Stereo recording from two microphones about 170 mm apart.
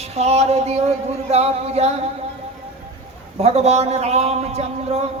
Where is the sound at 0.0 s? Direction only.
40° right (ahead or behind).